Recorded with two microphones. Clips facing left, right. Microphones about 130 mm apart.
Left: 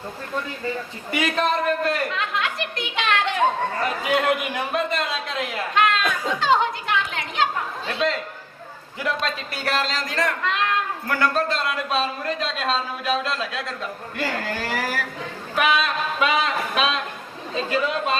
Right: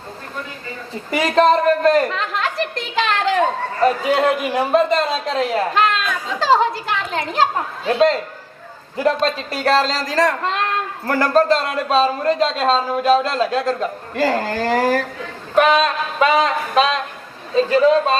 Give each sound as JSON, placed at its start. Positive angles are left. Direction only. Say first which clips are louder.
{"t": 1.1, "sound": "speech", "louder": "right 8 dB", "side_deg": -35}
{"t": 4.7, "sound": "speech", "louder": "right 9 dB", "side_deg": -35}